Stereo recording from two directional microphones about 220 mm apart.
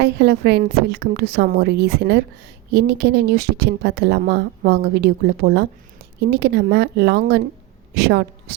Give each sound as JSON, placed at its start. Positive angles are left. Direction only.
{"t": 0.0, "sound": "a woman's voice", "side_deg": -50}